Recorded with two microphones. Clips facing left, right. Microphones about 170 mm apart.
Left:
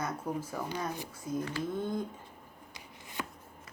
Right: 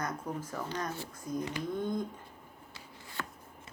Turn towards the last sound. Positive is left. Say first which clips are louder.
# left 2 dB
turn(degrees=15)  # may be behind; listen again after turning